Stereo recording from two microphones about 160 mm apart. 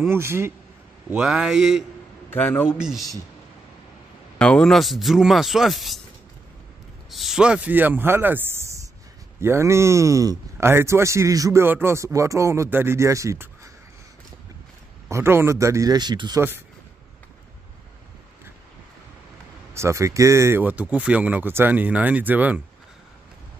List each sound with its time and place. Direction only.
0.0 s speech: 15° right (ahead or behind)
1.2 s speech: 5° right (ahead or behind)
2.3 s a man's voice: 10° left (ahead or behind)
2.8 s speech: centre (ahead or behind)
4.4 s speech: 5° left (ahead or behind)
7.1 s speech: centre (ahead or behind); by 13.5 s 20° right (ahead or behind)
15.0 s speech: 15° right (ahead or behind)
19.7 s speech: 15° right (ahead or behind)